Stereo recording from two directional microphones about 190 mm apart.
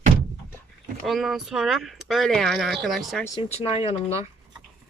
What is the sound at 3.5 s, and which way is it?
Speech, 30° left (ahead or behind).